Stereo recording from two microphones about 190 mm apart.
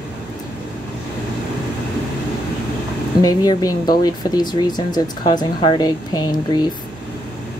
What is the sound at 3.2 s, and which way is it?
Speech, 20° left (ahead or behind).